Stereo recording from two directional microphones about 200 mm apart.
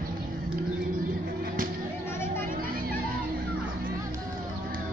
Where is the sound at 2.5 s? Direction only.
45° right (ahead or behind).